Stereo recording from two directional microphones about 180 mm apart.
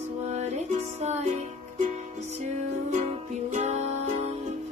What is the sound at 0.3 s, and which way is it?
Music, 40° right (ahead or behind).